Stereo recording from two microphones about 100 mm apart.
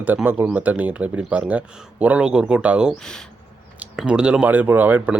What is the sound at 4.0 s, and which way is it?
Speech, 10° right (ahead or behind).